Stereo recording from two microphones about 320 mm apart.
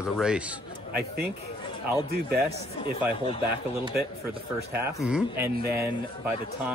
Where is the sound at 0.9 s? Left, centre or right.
Right.